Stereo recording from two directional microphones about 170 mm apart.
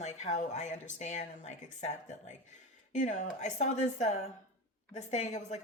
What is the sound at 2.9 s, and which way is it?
Speech, 45° left (ahead or behind).